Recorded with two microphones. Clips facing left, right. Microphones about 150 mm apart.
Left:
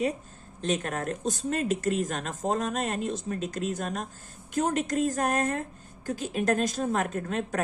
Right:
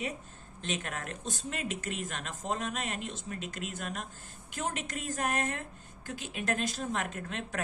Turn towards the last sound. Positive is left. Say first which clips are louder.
# left 8 dB
turn(degrees=45)  # may be behind; listen again after turning